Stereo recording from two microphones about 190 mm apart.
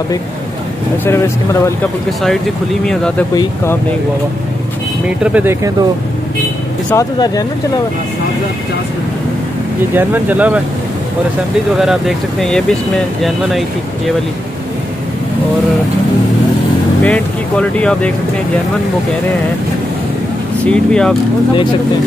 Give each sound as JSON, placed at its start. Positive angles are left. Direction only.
{"t": 1.0, "sound": "speech", "side_deg": 15}
{"t": 2.2, "sound": "speech", "side_deg": 0}
{"t": 5.2, "sound": "speech", "side_deg": -10}
{"t": 6.9, "sound": "speech", "side_deg": 15}
{"t": 9.9, "sound": "speech", "side_deg": -10}
{"t": 11.7, "sound": "speech", "side_deg": 0}
{"t": 17.0, "sound": "speech", "side_deg": 5}
{"t": 20.6, "sound": "speech", "side_deg": 5}